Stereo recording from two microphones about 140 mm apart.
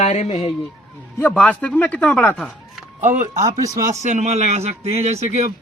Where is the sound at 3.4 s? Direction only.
25° right (ahead or behind).